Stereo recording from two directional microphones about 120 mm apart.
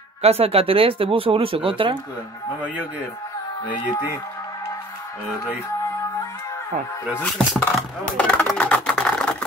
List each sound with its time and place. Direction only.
0.2 s speech: 55° right (ahead or behind)
3.6 s speech: 35° left (ahead or behind)
7.3 s speech: 5° left (ahead or behind)
8.3 s typing: 10° left (ahead or behind)